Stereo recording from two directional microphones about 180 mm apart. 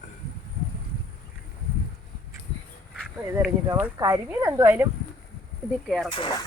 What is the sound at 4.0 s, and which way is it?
Speech, 15° right (ahead or behind).